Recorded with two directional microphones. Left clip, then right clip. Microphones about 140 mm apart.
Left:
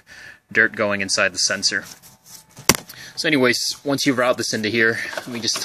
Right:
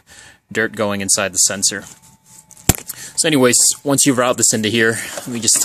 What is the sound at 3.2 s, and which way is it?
Speech, 55° right (ahead or behind).